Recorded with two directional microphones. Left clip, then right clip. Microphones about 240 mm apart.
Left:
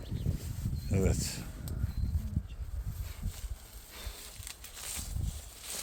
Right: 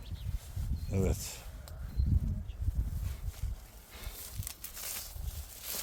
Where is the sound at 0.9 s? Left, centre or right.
Centre.